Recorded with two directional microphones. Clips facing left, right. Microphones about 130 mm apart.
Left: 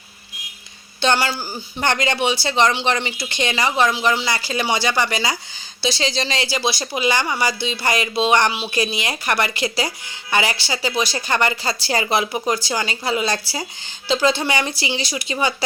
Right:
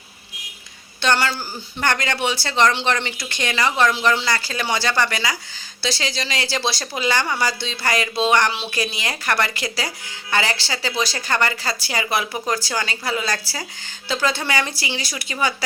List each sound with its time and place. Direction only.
1.0 s speech: 15° left (ahead or behind)
6.5 s speech: 10° left (ahead or behind)